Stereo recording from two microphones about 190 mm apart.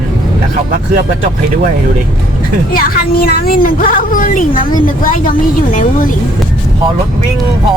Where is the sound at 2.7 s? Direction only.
50° left (ahead or behind).